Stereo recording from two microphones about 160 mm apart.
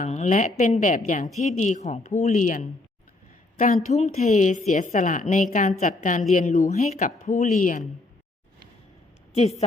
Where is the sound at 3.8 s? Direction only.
45° left (ahead or behind).